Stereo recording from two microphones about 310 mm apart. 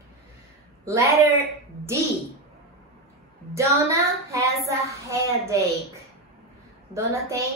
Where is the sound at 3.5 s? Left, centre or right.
Centre.